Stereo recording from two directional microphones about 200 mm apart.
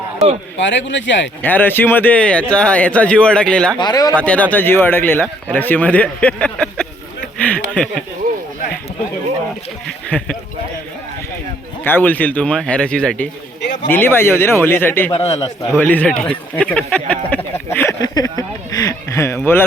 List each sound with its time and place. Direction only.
0.5 s speech: 65° left (ahead or behind)
1.4 s speech: 10° left (ahead or behind)
3.8 s speech: 20° left (ahead or behind)
4.2 s speech: 5° left (ahead or behind)
10.1 s speech: 5° left (ahead or behind)
11.8 s speech: 10° left (ahead or behind)
15.1 s a man's voice: 30° left (ahead or behind)
15.7 s speech: 10° left (ahead or behind)